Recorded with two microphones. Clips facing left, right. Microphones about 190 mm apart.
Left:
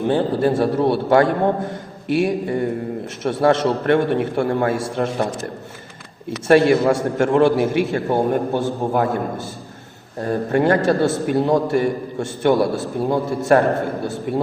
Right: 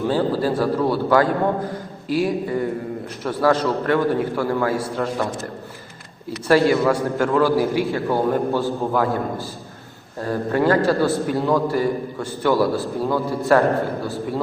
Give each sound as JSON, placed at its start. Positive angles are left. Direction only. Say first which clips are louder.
{"t": 0.1, "sound": "a man's voice", "louder": "left 4 dB", "side_deg": 25}
{"t": 6.5, "sound": "a man's voice", "louder": "left 2 dB", "side_deg": 25}